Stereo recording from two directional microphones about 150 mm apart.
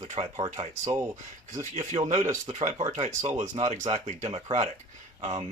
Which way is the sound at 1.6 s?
55° right (ahead or behind).